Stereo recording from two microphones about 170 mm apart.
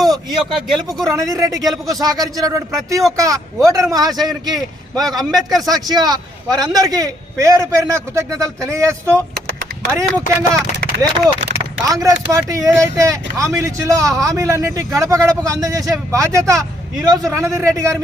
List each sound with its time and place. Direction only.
0.0 s a sound: 20° right (ahead or behind)
0.3 s speech: centre (ahead or behind)
1.1 s speech: 20° right (ahead or behind)
5.3 s speech: centre (ahead or behind)
5.7 s a man's voice: 25° right (ahead or behind)
10.9 s a sound: 90° right
11.9 s a man's voice: 20° right (ahead or behind)